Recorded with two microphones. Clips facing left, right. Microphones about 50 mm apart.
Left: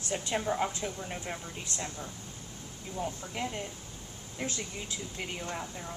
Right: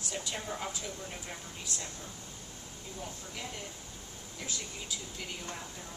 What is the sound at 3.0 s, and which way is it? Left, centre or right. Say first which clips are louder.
Speech: left 8 dB; left.